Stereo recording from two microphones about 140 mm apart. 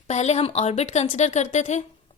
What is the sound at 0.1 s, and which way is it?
A woman's voice, 55° left (ahead or behind).